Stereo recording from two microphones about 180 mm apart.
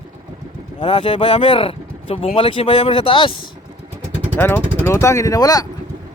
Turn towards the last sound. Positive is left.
turn(degrees=20)  # may be behind; listen again after turning